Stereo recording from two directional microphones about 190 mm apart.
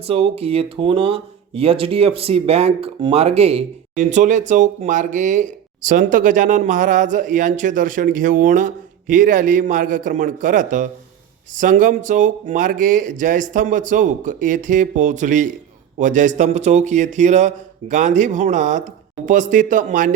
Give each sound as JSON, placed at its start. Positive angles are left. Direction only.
{"t": 0.0, "sound": "speech", "side_deg": -30}